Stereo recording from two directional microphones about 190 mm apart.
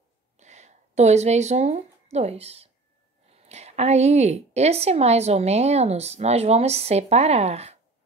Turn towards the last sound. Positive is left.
turn(degrees=-35)  # may be behind; listen again after turning